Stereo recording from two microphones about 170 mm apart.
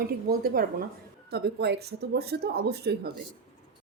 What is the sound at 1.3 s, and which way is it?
Speech, 75° right (ahead or behind).